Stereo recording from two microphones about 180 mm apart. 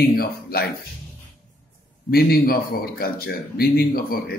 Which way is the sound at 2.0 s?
55° left (ahead or behind).